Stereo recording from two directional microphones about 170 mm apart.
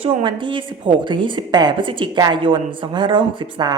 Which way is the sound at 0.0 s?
30° right (ahead or behind).